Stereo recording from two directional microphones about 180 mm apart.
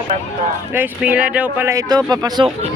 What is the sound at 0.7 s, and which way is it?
Speech, 10° right (ahead or behind).